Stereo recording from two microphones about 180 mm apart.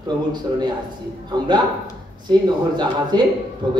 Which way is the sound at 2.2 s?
25° right (ahead or behind).